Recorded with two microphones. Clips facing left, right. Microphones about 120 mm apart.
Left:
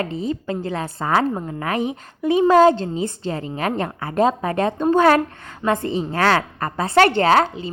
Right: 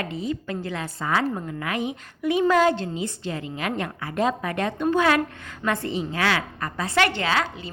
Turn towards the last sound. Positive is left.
turn(degrees=45)  # may be behind; listen again after turning